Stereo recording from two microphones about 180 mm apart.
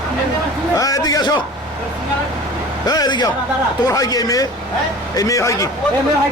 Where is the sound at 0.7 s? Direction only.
20° left (ahead or behind).